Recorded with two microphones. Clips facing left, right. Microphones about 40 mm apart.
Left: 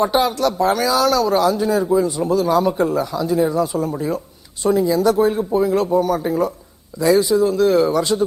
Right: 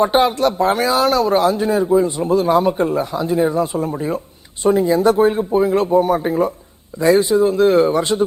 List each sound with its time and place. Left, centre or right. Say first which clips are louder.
0.0 s speech: right 2 dB; right